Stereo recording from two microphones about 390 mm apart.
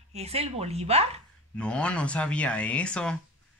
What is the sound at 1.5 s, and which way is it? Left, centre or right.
Speech, centre.